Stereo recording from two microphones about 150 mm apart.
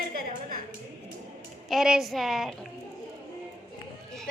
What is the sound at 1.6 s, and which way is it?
Speech, 5° right (ahead or behind).